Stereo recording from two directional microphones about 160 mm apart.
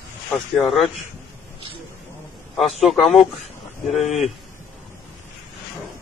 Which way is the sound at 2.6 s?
Centre (ahead or behind).